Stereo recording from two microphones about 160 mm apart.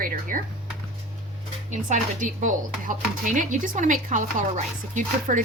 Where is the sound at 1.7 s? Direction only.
50° right (ahead or behind).